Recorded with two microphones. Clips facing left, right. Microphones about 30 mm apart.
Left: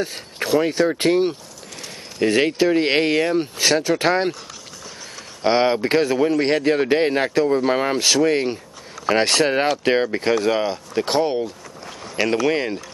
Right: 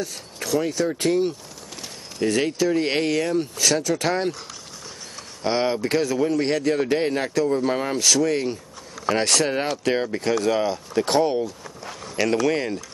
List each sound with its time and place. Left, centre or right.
0.0 s speech: left
5.4 s speech: left